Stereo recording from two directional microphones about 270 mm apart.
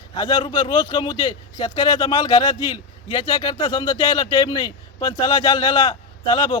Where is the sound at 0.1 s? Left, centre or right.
Centre.